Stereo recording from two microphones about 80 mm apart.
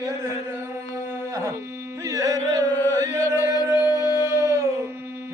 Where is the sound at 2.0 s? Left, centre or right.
Right.